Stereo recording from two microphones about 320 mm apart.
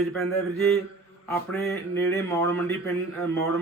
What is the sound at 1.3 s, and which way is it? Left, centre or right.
A man's voice, centre.